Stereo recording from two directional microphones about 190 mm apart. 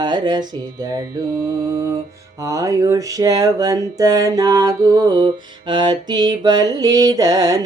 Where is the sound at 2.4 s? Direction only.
15° right (ahead or behind).